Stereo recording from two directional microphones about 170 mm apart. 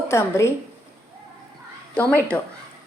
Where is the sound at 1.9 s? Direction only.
10° left (ahead or behind).